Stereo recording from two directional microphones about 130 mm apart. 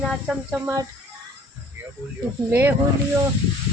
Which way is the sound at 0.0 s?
5° right (ahead or behind).